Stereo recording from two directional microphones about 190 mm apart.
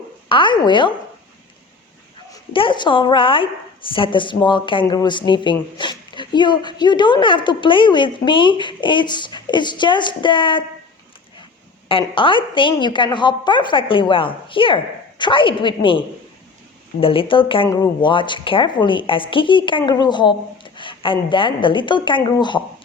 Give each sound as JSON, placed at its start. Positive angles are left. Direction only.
{"t": 0.3, "sound": "a woman's voice", "side_deg": 25}
{"t": 2.5, "sound": "a woman's voice", "side_deg": 25}
{"t": 11.9, "sound": "a woman's voice", "side_deg": 25}